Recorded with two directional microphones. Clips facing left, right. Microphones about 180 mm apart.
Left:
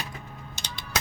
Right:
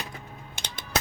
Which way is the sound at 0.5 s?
55° right (ahead or behind).